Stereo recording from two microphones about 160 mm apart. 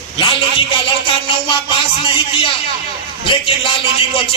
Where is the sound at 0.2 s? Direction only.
30° left (ahead or behind).